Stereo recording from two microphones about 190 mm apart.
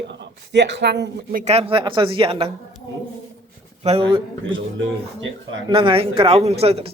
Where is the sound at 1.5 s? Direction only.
30° right (ahead or behind).